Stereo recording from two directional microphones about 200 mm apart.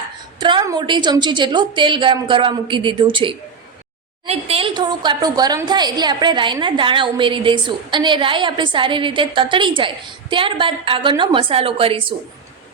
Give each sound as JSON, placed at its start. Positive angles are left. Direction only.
{"t": 0.3, "sound": "a woman's voice", "side_deg": -20}